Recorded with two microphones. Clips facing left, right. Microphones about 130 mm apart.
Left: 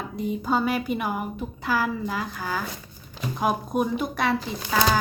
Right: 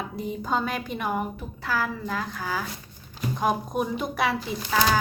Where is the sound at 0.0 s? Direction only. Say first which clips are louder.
Left 3 dB; centre (ahead or behind).